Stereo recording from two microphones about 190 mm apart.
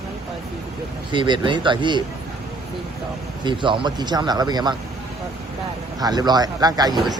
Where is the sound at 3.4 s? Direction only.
25° right (ahead or behind).